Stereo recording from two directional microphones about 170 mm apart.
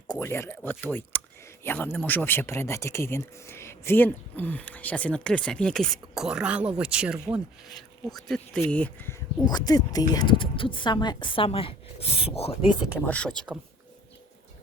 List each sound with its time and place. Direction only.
0.1 s speech: 15° left (ahead or behind)
9.5 s a woman's voice: 25° left (ahead or behind)
13.1 s speech: 5° left (ahead or behind)